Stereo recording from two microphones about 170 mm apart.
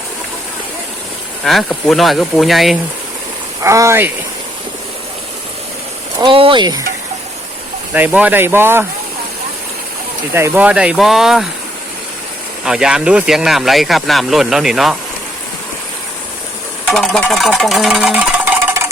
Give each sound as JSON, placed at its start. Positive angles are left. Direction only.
{"t": 1.5, "sound": "speech", "side_deg": 0}
{"t": 3.6, "sound": "speech", "side_deg": -15}
{"t": 6.1, "sound": "speech", "side_deg": -30}
{"t": 7.9, "sound": "speech", "side_deg": -10}
{"t": 10.3, "sound": "speech", "side_deg": -10}
{"t": 12.6, "sound": "speech", "side_deg": -5}
{"t": 16.9, "sound": "speech", "side_deg": 5}